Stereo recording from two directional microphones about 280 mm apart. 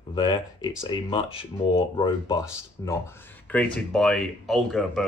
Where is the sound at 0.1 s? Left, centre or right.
Centre.